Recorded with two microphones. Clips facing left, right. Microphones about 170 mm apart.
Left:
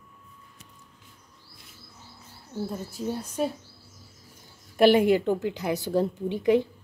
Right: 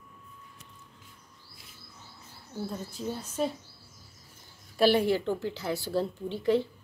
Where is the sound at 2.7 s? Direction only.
10° left (ahead or behind).